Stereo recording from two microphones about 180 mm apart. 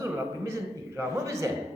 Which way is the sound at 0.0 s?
15° right (ahead or behind).